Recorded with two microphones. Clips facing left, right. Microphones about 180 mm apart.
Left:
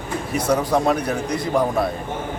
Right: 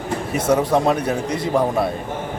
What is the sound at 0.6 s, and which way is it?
Speech, 25° right (ahead or behind).